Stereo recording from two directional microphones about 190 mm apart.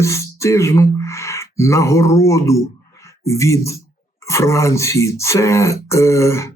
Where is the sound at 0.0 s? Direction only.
15° left (ahead or behind).